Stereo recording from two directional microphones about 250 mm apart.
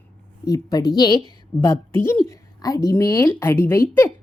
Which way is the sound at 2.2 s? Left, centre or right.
Centre.